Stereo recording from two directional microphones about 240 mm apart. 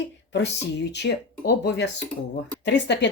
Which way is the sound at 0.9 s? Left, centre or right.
Left.